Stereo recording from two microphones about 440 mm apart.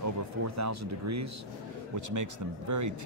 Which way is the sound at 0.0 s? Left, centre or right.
Right.